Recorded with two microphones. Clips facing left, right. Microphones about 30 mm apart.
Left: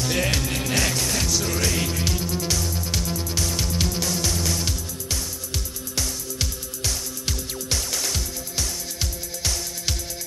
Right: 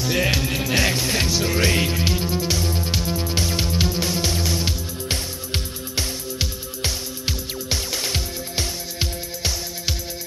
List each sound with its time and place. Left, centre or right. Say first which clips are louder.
0.0 s music: right 3 dB; centre
5.1 s music: right 3 dB; right
6.3 s music: right 2 dB; right